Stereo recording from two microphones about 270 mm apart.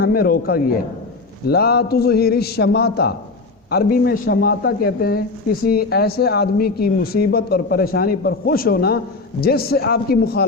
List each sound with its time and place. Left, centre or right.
0.0 s speech: left